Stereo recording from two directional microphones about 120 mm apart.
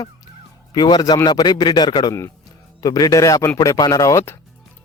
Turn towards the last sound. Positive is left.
turn(degrees=25)  # may be behind; listen again after turning